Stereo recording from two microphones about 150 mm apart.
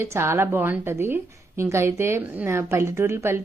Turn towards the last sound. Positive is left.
turn(degrees=-15)  # may be behind; listen again after turning